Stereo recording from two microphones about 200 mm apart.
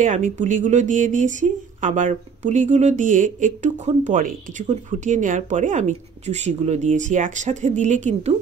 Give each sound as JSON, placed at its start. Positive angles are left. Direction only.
{"t": 0.0, "sound": "speech", "side_deg": -40}